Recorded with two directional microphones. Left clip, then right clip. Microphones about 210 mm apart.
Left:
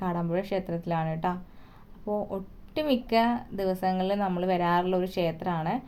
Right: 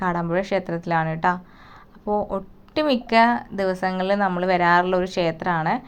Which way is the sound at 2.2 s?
5° right (ahead or behind).